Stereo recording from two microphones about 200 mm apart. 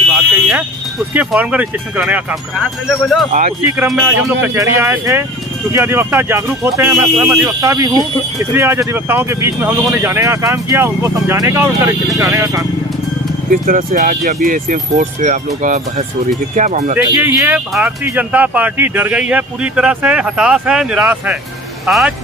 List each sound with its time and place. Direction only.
0.1 s a sound: 5° right (ahead or behind)
2.9 s speech: centre (ahead or behind)
3.3 s speech: 40° right (ahead or behind)
3.6 s speech: 15° right (ahead or behind)
13.7 s speech: 40° right (ahead or behind)
17.1 s speech: 15° right (ahead or behind)